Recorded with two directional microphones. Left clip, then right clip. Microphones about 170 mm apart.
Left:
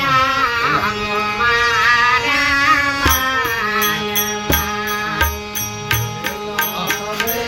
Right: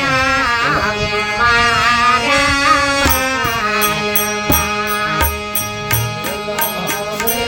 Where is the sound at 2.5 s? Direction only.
50° right (ahead or behind).